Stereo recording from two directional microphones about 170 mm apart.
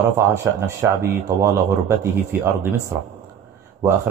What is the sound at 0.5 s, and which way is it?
A man's voice, 15° right (ahead or behind).